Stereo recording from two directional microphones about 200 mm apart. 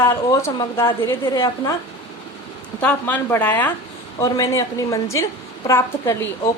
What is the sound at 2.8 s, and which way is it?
A woman's voice, 10° left (ahead or behind).